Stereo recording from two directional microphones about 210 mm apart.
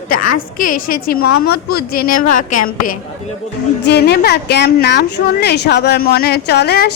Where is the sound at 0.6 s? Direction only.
40° left (ahead or behind).